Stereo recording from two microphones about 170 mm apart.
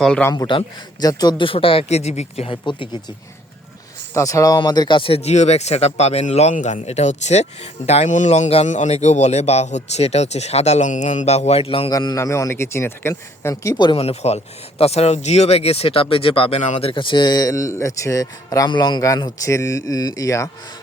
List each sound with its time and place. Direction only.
0.0 s a man's voice: 5° left (ahead or behind)
0.3 s a man's voice: 25° left (ahead or behind)
4.1 s a man's voice: 20° left (ahead or behind); by 11.9 s 35° left (ahead or behind)
11.9 s a man's voice: 20° left (ahead or behind)